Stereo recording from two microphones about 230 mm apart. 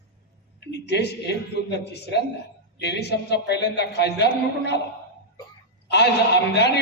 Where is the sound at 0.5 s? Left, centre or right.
Left.